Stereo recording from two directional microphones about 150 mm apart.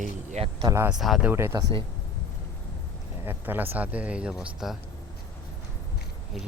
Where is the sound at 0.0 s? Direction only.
55° right (ahead or behind).